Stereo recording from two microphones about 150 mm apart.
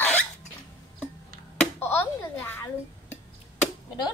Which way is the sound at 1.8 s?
15° left (ahead or behind).